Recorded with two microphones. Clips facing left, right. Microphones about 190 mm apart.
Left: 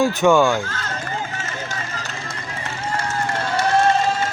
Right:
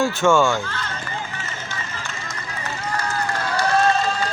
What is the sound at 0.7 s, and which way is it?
Speech, 40° left (ahead or behind).